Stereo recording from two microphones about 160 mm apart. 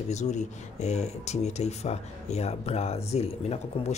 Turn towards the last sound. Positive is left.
turn(degrees=40)  # may be behind; listen again after turning